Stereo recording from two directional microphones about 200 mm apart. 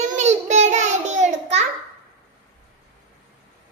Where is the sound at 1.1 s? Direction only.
35° right (ahead or behind).